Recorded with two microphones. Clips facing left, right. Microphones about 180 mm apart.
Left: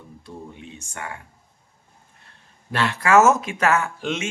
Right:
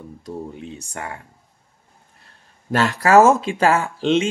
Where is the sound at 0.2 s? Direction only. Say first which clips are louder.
Right 7 dB; 40° right (ahead or behind).